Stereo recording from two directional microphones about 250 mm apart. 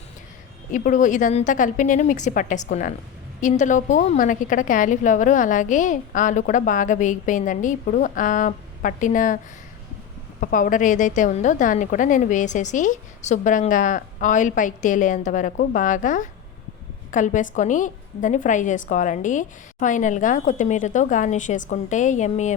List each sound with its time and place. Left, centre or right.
0.7 s a woman's voice: left
10.4 s a woman's voice: left